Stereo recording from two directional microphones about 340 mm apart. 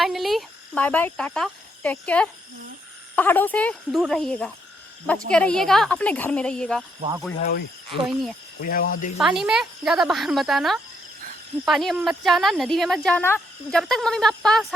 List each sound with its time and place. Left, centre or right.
0.0 s speech: centre
7.3 s cricket: left
8.6 s cricket: left
9.1 s speech: centre